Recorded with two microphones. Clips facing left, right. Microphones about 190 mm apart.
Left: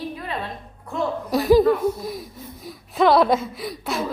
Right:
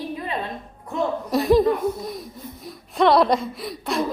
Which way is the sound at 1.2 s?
Centre (ahead or behind).